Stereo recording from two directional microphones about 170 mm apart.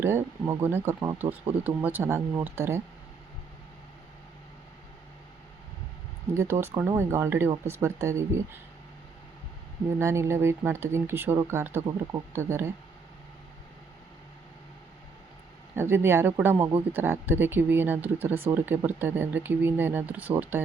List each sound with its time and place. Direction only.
0.0 s speech: 15° right (ahead or behind)
6.3 s speech: 15° right (ahead or behind)
10.0 s speech: 15° right (ahead or behind)
15.7 s speech: 15° right (ahead or behind)